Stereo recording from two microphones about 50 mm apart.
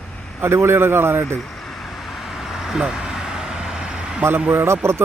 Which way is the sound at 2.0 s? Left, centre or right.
Centre.